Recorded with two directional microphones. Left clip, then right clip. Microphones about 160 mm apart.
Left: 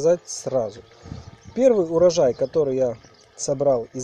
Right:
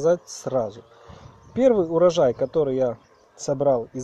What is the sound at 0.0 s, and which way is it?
Speech, 15° right (ahead or behind).